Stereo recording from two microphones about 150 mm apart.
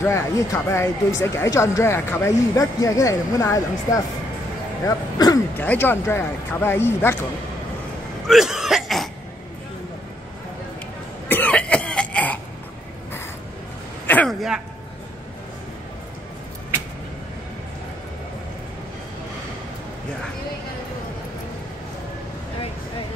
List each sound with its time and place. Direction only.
0.0 s speech: 15° left (ahead or behind)
5.6 s speech: 15° left (ahead or behind)
8.3 s throat clearing: 5° right (ahead or behind)
11.2 s cough: 10° left (ahead or behind)
14.0 s a sound: 10° left (ahead or behind)